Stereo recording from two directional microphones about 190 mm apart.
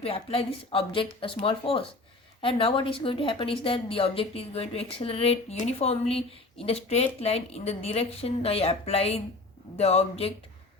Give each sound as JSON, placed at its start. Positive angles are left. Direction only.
{"t": 0.0, "sound": "a woman's voice", "side_deg": 30}